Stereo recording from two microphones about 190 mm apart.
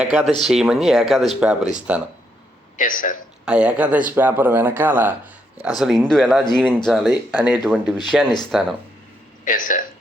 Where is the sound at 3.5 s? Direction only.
5° right (ahead or behind).